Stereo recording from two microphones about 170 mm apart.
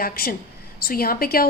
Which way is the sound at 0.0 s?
60° left (ahead or behind).